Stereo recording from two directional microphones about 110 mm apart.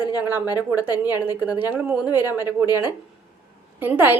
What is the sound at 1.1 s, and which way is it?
Speech, 15° right (ahead or behind).